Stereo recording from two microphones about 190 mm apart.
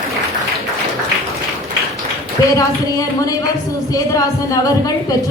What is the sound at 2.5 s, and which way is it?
A woman's voice, 15° left (ahead or behind).